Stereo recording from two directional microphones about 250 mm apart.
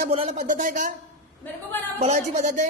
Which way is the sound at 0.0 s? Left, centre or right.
Right.